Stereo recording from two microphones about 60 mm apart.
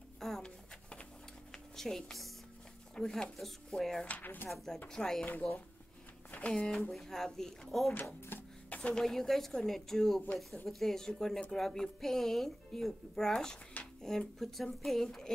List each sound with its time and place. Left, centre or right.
0.2 s a sound: centre
1.5 s music: centre
3.0 s speech: centre
4.2 s speech: left
4.8 s speech: centre
7.9 s a sound: left
8.9 s speech: centre